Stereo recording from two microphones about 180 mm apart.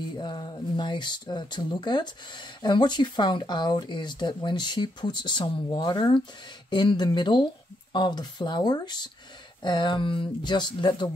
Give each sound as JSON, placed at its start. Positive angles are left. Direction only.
{"t": 0.2, "sound": "speech", "side_deg": 25}